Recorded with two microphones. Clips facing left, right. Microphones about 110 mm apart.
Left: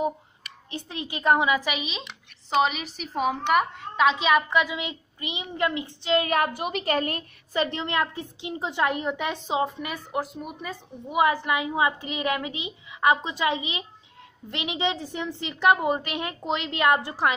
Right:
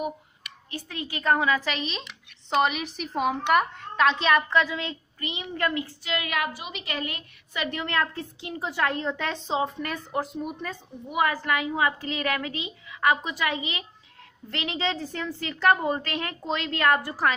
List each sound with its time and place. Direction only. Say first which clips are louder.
0.0 s a woman's voice: left 4 dB; 25° left (ahead or behind)
6.5 s a woman's voice: left 9 dB; 50° left (ahead or behind); by 10.8 s 5° left (ahead or behind)
11.1 s a woman's voice: left 2 dB; 20° left (ahead or behind)